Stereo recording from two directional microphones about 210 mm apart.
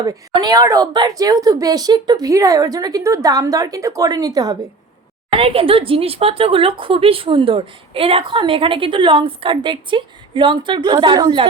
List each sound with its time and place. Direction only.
0.0 s a woman's voice: 15° right (ahead or behind)